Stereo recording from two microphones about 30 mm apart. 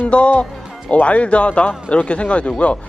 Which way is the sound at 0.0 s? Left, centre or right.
Left.